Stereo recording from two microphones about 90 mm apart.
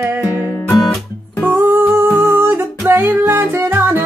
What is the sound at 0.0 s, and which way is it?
Music, 20° right (ahead or behind).